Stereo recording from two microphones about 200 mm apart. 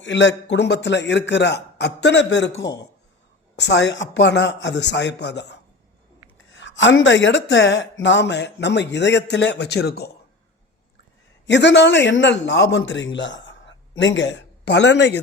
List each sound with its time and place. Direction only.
0.0 s speech: 65° left (ahead or behind)
3.5 s speech: 60° left (ahead or behind)
11.4 s a man's voice: 60° left (ahead or behind)